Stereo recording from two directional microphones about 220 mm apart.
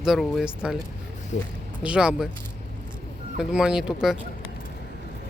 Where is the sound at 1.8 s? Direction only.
5° right (ahead or behind).